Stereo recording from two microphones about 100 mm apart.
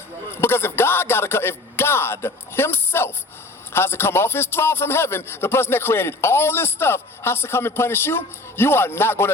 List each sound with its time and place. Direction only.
0.4 s music: 25° left (ahead or behind)
3.7 s a man's voice: 25° left (ahead or behind)